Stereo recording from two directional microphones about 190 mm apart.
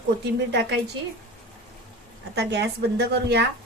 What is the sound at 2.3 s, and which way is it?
A woman's voice, 60° right (ahead or behind).